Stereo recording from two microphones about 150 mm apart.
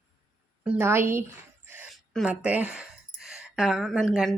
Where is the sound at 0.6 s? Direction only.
10° right (ahead or behind).